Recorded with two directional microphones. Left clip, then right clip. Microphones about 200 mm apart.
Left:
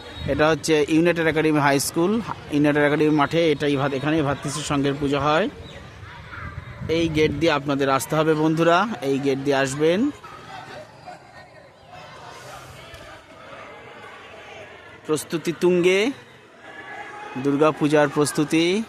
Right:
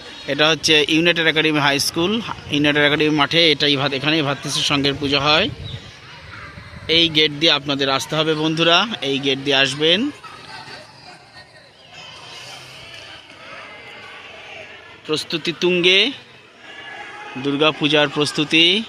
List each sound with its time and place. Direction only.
0.3 s speech: 5° left (ahead or behind)
6.9 s speech: centre (ahead or behind)
9.0 s speech: 40° left (ahead or behind)
9.2 s speech: 5° left (ahead or behind)
15.0 s speech: 10° left (ahead or behind)
17.4 s speech: 10° left (ahead or behind)